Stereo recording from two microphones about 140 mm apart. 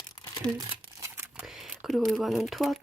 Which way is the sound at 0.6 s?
20° right (ahead or behind).